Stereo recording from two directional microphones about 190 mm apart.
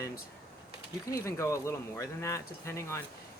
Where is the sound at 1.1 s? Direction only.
15° left (ahead or behind).